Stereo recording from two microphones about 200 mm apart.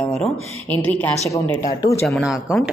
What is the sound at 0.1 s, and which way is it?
A woman's voice, 5° left (ahead or behind).